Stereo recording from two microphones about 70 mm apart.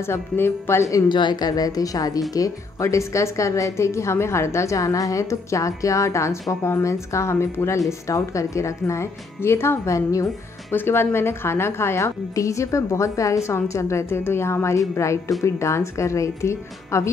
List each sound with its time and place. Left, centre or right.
0.0 s a woman's voice: left
1.0 s a woman's voice: left
10.7 s a woman's voice: left